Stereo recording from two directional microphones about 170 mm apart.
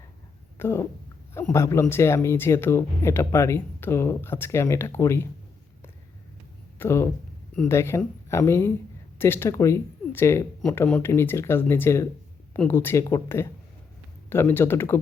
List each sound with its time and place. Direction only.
0.6 s speech: 15° left (ahead or behind)
6.7 s speech: 15° left (ahead or behind)